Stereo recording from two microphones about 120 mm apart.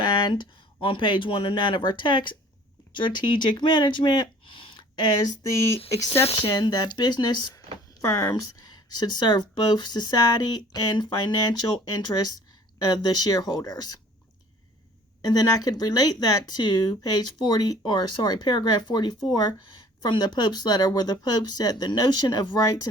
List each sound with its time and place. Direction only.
0.0 s speech: 40° left (ahead or behind)
6.3 s speech: 40° left (ahead or behind)
8.6 s a sound: 35° left (ahead or behind)
9.7 s speech: 35° left (ahead or behind)
15.2 s speech: 35° left (ahead or behind)